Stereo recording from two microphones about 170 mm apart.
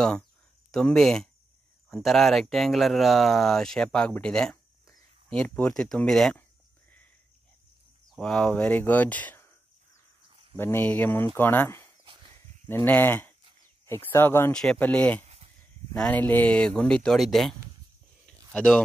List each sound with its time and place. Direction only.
0.7 s speech: 5° left (ahead or behind)
8.1 s speech: 5° left (ahead or behind)
10.3 s cricket: 30° right (ahead or behind)
10.6 s speech: 10° left (ahead or behind)
15.2 s a sound: 35° right (ahead or behind)
15.9 s speech: 10° left (ahead or behind)
18.2 s a sound: 5° left (ahead or behind)